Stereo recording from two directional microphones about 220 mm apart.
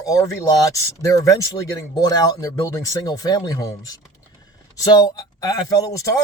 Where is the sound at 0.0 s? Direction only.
15° left (ahead or behind).